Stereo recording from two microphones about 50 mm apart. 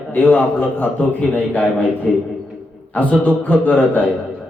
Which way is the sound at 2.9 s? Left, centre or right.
Left.